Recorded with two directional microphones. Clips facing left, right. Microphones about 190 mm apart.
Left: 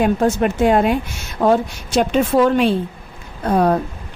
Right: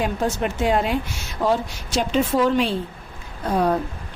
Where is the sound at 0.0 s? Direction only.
55° left (ahead or behind).